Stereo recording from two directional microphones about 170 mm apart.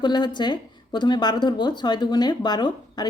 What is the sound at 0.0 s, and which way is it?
A woman's voice, 25° left (ahead or behind).